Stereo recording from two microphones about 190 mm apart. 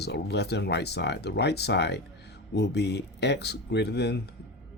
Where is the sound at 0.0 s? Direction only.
60° left (ahead or behind).